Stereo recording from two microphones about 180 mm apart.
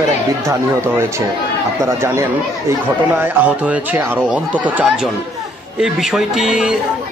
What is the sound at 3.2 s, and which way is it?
A man's voice, 10° right (ahead or behind).